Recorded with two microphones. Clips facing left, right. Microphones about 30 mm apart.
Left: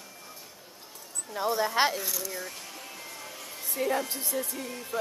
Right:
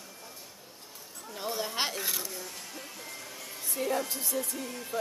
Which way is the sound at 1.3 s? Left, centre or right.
Centre.